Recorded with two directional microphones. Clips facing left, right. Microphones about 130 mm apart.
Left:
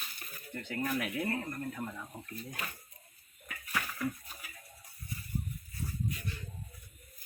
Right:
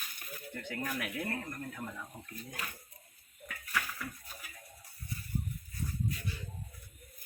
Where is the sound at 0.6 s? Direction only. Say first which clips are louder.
Left 4 dB; centre (ahead or behind).